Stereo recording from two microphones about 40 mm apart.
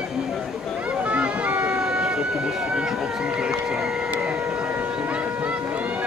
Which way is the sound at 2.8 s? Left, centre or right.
Centre.